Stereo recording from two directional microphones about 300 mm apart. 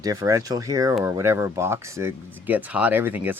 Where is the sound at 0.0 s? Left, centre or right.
Centre.